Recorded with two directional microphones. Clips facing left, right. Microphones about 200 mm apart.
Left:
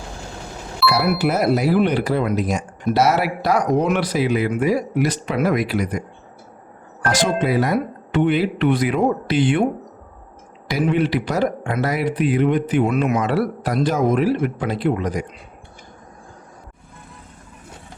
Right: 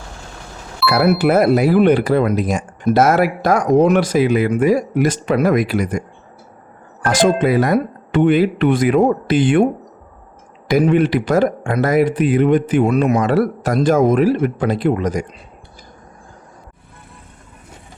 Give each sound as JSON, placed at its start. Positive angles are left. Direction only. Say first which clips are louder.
{"t": 0.8, "sound": "music", "louder": "right 1 dB", "side_deg": 0}
{"t": 1.2, "sound": "speech", "louder": "right 5 dB", "side_deg": -55}
{"t": 7.0, "sound": "speech", "louder": "right 5 dB", "side_deg": -50}
{"t": 10.7, "sound": "speech", "louder": "right 5 dB", "side_deg": -50}